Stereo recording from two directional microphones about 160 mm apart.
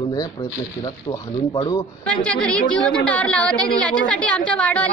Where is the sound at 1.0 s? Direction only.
30° left (ahead or behind).